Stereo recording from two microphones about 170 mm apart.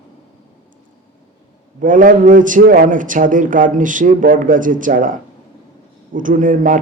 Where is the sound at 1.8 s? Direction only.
50° right (ahead or behind).